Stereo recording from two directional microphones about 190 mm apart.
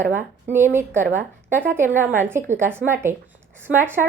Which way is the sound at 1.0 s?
40° right (ahead or behind).